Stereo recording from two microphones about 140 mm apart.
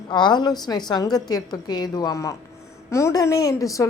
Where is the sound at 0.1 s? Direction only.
30° left (ahead or behind).